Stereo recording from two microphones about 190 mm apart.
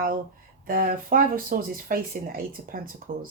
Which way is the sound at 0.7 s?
50° right (ahead or behind).